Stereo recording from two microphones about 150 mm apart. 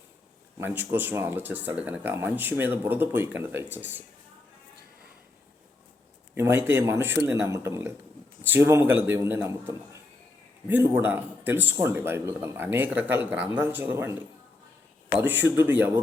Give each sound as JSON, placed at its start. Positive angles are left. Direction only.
{"t": 0.6, "sound": "speech", "side_deg": -15}
{"t": 6.3, "sound": "speech", "side_deg": -15}